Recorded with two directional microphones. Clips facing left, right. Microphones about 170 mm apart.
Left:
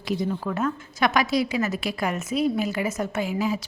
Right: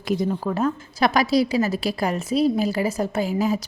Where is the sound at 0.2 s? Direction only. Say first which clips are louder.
Right 3 dB; 35° right (ahead or behind).